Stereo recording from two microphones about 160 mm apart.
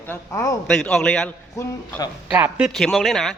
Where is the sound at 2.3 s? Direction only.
10° right (ahead or behind).